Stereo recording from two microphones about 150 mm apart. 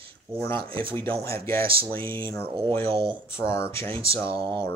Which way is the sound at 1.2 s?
20° left (ahead or behind).